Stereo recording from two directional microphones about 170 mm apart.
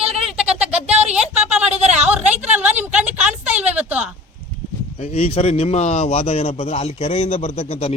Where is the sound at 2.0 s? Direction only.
10° right (ahead or behind).